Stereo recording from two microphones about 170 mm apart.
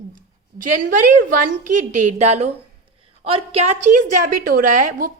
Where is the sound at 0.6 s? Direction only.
55° right (ahead or behind).